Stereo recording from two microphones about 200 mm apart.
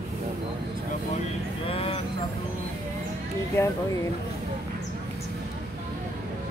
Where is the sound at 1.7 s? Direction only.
30° left (ahead or behind).